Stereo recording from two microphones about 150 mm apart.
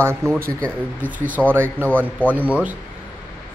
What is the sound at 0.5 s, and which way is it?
Speech, 10° left (ahead or behind).